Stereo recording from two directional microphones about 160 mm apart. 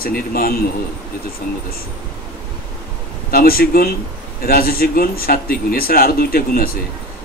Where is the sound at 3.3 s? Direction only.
70° left (ahead or behind).